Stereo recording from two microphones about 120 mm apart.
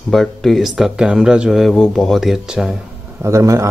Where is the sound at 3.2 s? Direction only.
25° right (ahead or behind).